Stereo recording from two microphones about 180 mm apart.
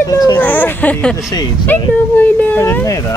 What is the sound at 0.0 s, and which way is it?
Speech, 20° left (ahead or behind).